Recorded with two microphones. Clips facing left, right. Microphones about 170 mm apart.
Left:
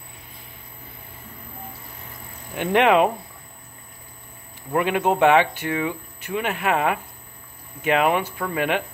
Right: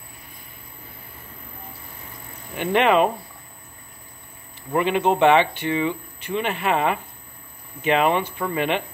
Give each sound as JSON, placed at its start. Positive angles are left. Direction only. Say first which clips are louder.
{"t": 2.5, "sound": "speech", "louder": "left 1 dB", "side_deg": 10}
{"t": 4.7, "sound": "speech", "louder": "right 1 dB", "side_deg": 10}